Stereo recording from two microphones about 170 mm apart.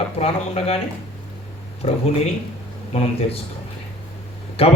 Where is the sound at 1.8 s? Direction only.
35° left (ahead or behind).